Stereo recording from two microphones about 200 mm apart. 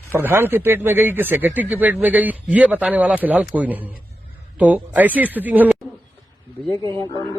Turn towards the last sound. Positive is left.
turn(degrees=20)  # may be behind; listen again after turning